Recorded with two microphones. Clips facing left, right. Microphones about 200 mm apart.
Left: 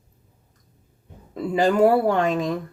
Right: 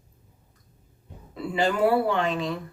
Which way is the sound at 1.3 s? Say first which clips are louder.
Left 5 dB; 45° left (ahead or behind).